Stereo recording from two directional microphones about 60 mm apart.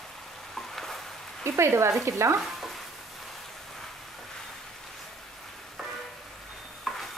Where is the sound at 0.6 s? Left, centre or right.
Centre.